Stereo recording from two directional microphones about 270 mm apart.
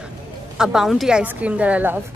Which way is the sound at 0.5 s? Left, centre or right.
Centre.